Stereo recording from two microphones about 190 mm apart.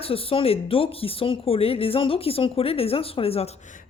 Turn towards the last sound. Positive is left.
turn(degrees=40)  # may be behind; listen again after turning